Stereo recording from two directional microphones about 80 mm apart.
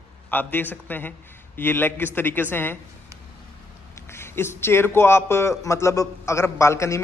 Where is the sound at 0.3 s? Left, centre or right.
Left.